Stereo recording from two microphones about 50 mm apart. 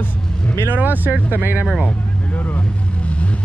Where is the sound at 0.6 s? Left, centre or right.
Right.